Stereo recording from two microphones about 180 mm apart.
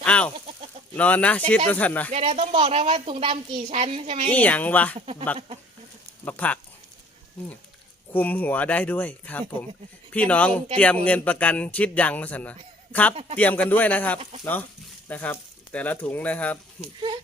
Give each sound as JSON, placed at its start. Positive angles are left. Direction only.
{"t": 0.0, "sound": "chicken", "side_deg": 5}
{"t": 0.3, "sound": "chicken", "side_deg": -35}
{"t": 0.9, "sound": "speech", "side_deg": 10}
{"t": 2.1, "sound": "a woman's voice", "side_deg": -35}
{"t": 4.3, "sound": "speech", "side_deg": 10}
{"t": 6.2, "sound": "speech", "side_deg": 10}
{"t": 8.1, "sound": "speech", "side_deg": 10}
{"t": 13.1, "sound": "a woman's voice", "side_deg": -30}
{"t": 13.4, "sound": "speech", "side_deg": 10}